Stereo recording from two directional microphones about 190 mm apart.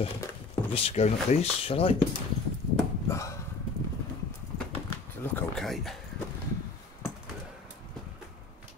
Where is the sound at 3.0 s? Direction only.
15° left (ahead or behind).